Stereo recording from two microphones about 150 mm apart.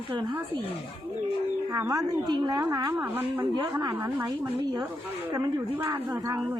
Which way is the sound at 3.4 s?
30° right (ahead or behind).